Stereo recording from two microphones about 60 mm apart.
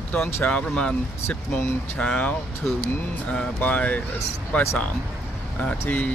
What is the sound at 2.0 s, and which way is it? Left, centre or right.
Speech, centre.